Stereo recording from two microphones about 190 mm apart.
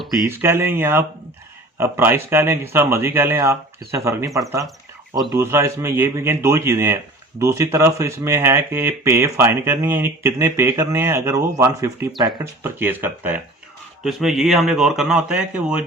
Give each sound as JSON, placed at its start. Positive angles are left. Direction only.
{"t": 0.3, "sound": "a man's voice", "side_deg": -15}